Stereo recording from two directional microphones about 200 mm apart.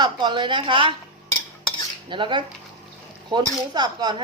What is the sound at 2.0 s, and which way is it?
Speech, 25° right (ahead or behind).